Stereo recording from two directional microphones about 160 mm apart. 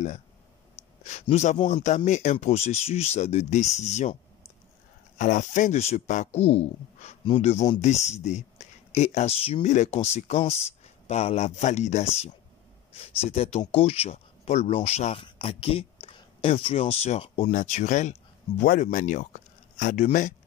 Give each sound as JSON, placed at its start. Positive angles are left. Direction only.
{"t": 1.3, "sound": "speech", "side_deg": 45}
{"t": 18.6, "sound": "speech", "side_deg": 70}
{"t": 18.9, "sound": "speech", "side_deg": 50}